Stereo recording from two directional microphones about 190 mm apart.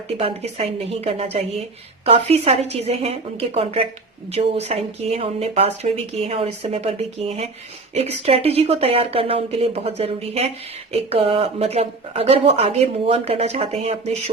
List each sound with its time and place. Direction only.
0.2 s speech: 30° right (ahead or behind)